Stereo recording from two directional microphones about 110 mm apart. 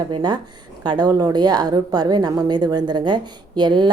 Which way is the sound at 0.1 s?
45° right (ahead or behind).